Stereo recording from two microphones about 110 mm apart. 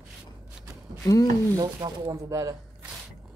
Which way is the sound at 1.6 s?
35° right (ahead or behind).